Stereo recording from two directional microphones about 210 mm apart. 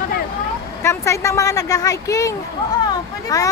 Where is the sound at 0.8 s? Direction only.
15° left (ahead or behind).